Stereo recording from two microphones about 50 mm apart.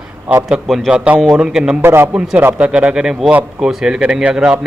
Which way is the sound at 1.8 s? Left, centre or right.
Right.